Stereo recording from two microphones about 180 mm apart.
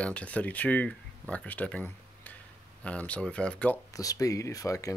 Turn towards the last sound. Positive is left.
turn(degrees=15)  # may be behind; listen again after turning